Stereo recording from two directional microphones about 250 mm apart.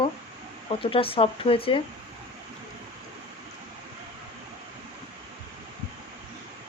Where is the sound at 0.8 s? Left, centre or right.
Left.